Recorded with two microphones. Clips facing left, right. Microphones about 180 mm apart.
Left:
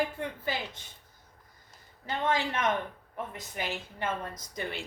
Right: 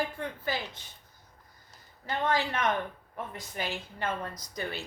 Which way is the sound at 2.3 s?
20° left (ahead or behind).